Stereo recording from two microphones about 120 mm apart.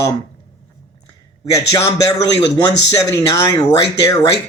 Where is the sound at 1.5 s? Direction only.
30° left (ahead or behind).